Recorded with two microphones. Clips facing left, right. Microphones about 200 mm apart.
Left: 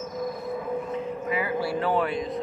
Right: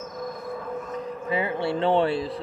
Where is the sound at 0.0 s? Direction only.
5° left (ahead or behind).